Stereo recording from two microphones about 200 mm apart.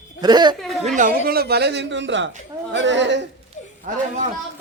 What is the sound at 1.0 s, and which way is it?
A woman's voice, 45° right (ahead or behind).